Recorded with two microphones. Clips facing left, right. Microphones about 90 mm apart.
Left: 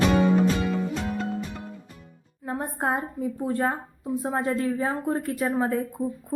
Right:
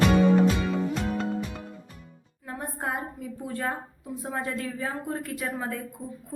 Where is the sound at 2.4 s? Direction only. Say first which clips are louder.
Left 5 dB; 30° left (ahead or behind).